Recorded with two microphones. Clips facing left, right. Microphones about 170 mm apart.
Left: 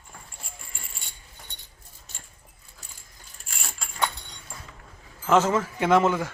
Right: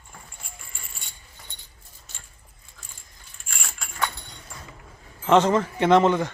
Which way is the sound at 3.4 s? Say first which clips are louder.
Even; 35° left (ahead or behind).